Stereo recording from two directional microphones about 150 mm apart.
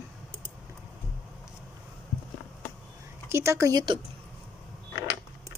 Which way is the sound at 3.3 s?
20° right (ahead or behind).